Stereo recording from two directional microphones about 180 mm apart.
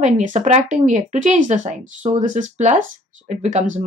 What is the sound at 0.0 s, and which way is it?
A woman's voice, 40° right (ahead or behind).